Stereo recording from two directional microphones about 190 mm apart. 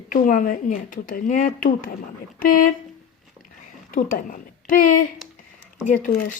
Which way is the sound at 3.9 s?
45° left (ahead or behind).